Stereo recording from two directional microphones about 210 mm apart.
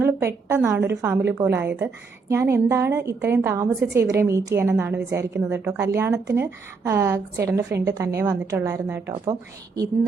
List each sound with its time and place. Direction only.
0.0 s a woman's voice: 10° right (ahead or behind)